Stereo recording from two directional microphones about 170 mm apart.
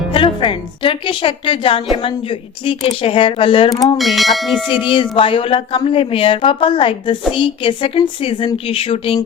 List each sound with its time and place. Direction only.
0.1 s a woman's voice: 30° left (ahead or behind)
3.9 s bell: centre (ahead or behind)
5.1 s a woman's voice: 30° left (ahead or behind)